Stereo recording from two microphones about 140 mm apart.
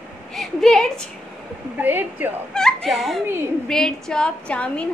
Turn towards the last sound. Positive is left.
turn(degrees=10)  # may be behind; listen again after turning